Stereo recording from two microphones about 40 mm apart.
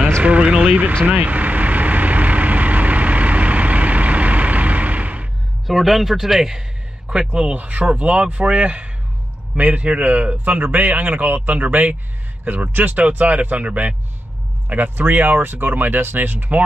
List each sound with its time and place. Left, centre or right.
0.2 s a man's voice: right
0.7 s speech: right
1.0 s vehicle: right
5.7 s speech: centre
7.5 s a man's voice: right
14.7 s speech: right
15.4 s speech: right